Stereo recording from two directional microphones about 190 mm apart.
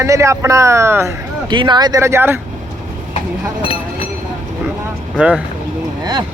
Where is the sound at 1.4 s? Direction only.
25° right (ahead or behind).